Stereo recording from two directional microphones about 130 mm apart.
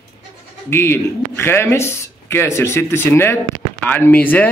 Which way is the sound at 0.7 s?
20° left (ahead or behind).